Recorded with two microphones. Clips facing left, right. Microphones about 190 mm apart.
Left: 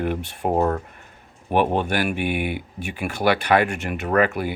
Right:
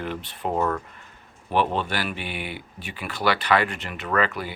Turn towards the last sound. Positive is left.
turn(degrees=50)  # may be behind; listen again after turning